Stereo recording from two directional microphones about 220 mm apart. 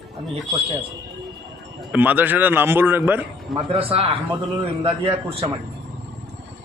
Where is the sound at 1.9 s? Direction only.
5° right (ahead or behind).